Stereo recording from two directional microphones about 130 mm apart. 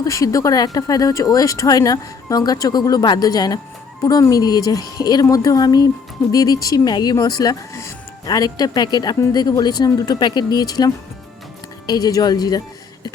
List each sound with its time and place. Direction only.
0.0 s speech: 25° left (ahead or behind)